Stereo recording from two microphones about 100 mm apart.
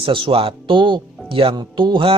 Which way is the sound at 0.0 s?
60° right (ahead or behind).